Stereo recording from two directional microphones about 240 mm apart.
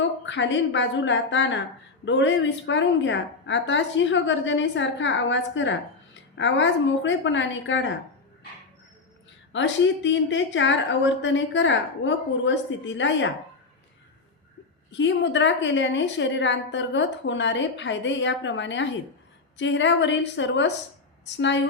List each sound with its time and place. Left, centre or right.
0.3 s a woman's voice: left
9.5 s a woman's voice: left
14.9 s a woman's voice: left